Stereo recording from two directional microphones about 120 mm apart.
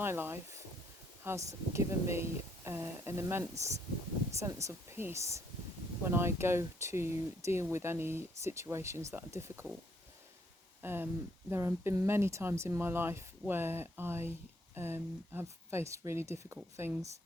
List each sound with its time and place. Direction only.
0.0 s speech: 20° right (ahead or behind)
10.8 s speech: 20° right (ahead or behind)